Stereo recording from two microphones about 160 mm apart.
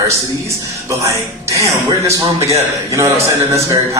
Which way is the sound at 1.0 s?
20° right (ahead or behind).